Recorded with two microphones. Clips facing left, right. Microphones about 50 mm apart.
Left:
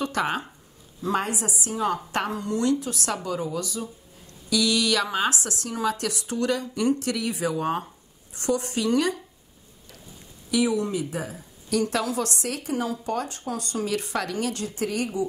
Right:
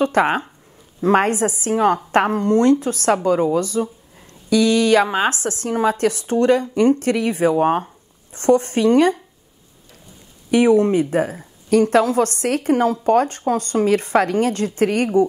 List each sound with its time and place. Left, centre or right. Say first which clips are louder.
0.0 s a woman's voice: right 9 dB; right
10.5 s speech: right 10 dB; right